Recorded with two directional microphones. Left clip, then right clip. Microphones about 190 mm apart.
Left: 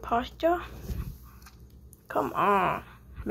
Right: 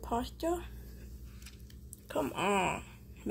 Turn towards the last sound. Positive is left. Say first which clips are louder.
# left 6 dB
turn(degrees=-15)  # may be behind; listen again after turning